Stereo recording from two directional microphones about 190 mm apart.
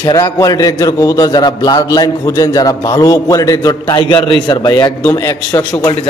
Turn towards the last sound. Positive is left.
turn(degrees=20)  # may be behind; listen again after turning